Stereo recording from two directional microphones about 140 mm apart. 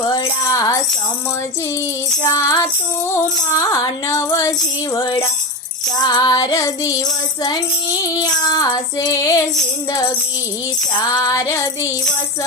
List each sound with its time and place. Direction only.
0.1 s music: 25° left (ahead or behind)
2.3 s music: 25° left (ahead or behind)
8.2 s music: 25° left (ahead or behind)
11.1 s music: 25° left (ahead or behind)